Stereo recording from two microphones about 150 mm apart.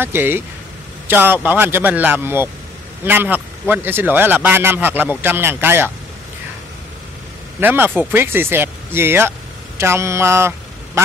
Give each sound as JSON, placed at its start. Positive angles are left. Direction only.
{"t": 0.0, "sound": "speech", "side_deg": -15}
{"t": 7.6, "sound": "speech", "side_deg": -15}